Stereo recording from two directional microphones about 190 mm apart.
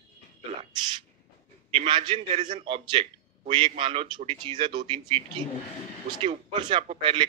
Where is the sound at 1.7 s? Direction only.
25° right (ahead or behind).